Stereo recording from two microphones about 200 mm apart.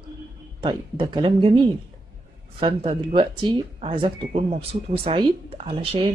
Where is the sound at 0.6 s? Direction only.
20° right (ahead or behind).